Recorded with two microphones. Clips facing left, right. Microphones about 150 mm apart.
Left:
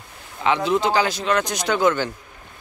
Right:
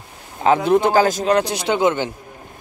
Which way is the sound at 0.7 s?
55° right (ahead or behind).